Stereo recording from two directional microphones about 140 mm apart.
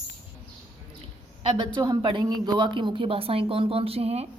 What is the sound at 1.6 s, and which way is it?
Speech, 30° right (ahead or behind).